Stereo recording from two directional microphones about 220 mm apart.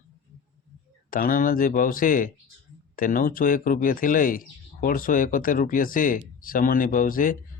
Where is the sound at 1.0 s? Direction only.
40° left (ahead or behind).